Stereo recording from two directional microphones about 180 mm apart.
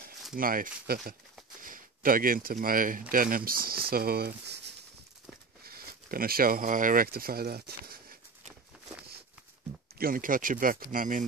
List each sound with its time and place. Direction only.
0.4 s speech: 50° right (ahead or behind)
8.7 s patter: 5° right (ahead or behind)
9.9 s speech: 55° right (ahead or behind)